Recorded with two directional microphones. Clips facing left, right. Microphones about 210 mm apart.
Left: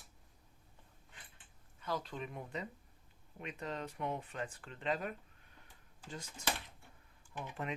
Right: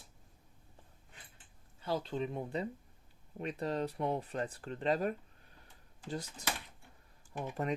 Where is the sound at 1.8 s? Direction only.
30° right (ahead or behind).